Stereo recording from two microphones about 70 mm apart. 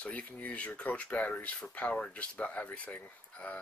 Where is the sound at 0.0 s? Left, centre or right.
Left.